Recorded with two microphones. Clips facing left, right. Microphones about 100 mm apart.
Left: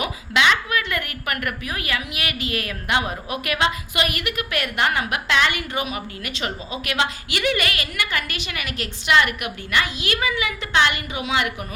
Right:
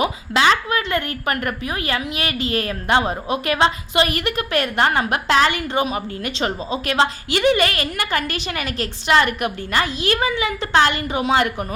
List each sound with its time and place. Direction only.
0.0 s a woman's voice: 35° right (ahead or behind)